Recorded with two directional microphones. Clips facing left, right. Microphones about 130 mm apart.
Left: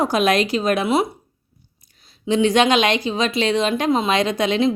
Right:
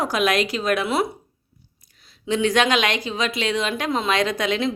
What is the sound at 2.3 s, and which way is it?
Speech, 25° left (ahead or behind).